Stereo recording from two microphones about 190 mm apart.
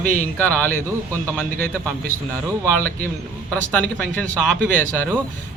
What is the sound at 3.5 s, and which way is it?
Speech, 5° left (ahead or behind).